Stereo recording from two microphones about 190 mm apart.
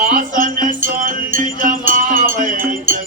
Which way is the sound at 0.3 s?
45° right (ahead or behind).